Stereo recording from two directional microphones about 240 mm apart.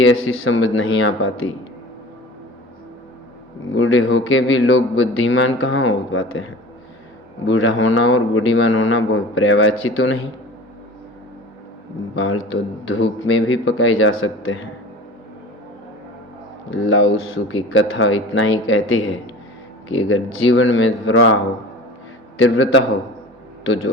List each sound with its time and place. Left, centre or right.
0.0 s a man's voice: left
3.8 s a man's voice: left
7.4 s a man's voice: left
12.1 s a man's voice: left
16.6 s a man's voice: left
22.4 s a man's voice: left